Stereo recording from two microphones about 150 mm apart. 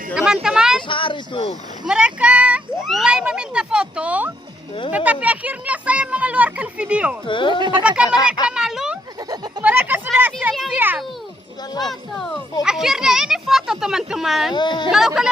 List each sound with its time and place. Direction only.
0.4 s a sound: 5° right (ahead or behind)
0.9 s speech: 35° left (ahead or behind)
1.9 s speech: 5° right (ahead or behind)
7.3 s speech: 35° left (ahead or behind)
7.6 s speech: 30° right (ahead or behind)
7.9 s speech: 5° right (ahead or behind)
8.4 s a sound: 5° right (ahead or behind)
11.9 s speech: 5° left (ahead or behind)
14.5 s speech: 30° left (ahead or behind)
14.8 s speech: 5° right (ahead or behind)